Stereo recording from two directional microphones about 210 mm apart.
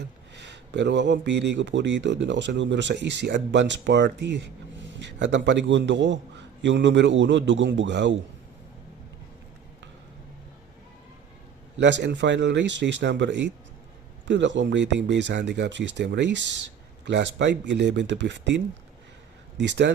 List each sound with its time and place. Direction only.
0.3 s speech: 55° right (ahead or behind)
11.8 s speech: 55° right (ahead or behind)